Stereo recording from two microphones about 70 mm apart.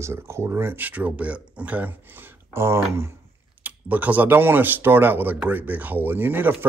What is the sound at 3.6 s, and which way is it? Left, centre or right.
Speech, right.